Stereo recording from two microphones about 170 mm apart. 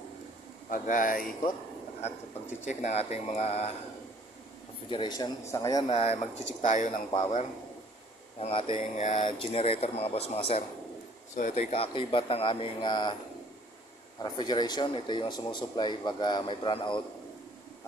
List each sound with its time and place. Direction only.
0.7 s speech: 50° left (ahead or behind)
2.0 s speech: 40° left (ahead or behind)
4.8 s a man's voice: 25° left (ahead or behind)
5.9 s speech: 40° left (ahead or behind)
7.1 s speech: 30° left (ahead or behind)
11.3 s speech: 45° left (ahead or behind); by 13.1 s 25° left (ahead or behind)
14.2 s a man's voice: 25° left (ahead or behind)